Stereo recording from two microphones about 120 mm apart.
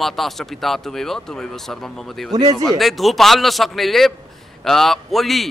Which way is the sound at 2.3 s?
35° right (ahead or behind).